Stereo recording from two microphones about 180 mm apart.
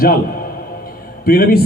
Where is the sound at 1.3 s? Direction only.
55° left (ahead or behind).